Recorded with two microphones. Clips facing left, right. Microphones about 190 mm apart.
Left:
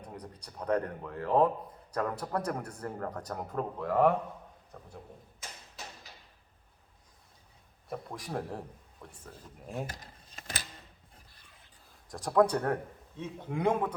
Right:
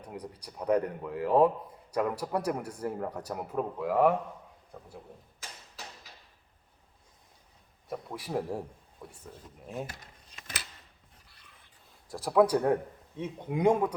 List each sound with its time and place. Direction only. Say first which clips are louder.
0.2 s a man's voice: right 3 dB; 10° right (ahead or behind)
7.9 s speech: right 2 dB; 5° right (ahead or behind)
9.8 s a sound: left 1 dB; 35° left (ahead or behind)
11.9 s a man's voice: right 2 dB; 5° right (ahead or behind)